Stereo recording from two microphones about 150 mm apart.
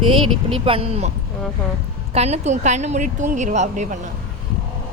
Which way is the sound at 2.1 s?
45° right (ahead or behind).